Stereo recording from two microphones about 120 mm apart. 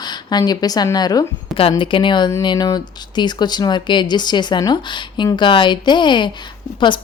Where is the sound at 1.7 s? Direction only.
45° left (ahead or behind).